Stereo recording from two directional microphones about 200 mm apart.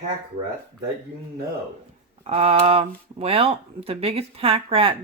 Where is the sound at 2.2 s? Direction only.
30° right (ahead or behind).